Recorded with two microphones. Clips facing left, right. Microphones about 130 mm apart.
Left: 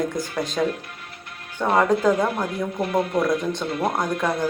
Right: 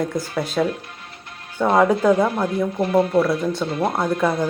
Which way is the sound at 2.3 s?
30° right (ahead or behind).